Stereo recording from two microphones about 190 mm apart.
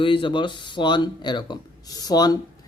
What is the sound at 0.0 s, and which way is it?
Speech, 25° left (ahead or behind).